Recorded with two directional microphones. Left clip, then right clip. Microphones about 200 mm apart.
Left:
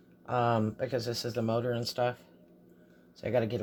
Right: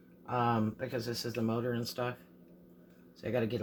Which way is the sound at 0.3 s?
50° left (ahead or behind).